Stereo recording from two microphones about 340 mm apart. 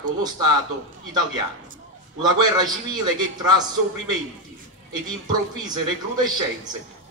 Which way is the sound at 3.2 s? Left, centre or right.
Centre.